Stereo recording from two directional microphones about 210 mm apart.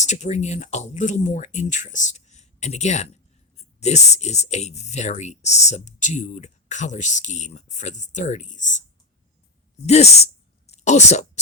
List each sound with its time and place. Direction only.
0.0 s speech: 35° left (ahead or behind)
9.8 s speech: 30° left (ahead or behind)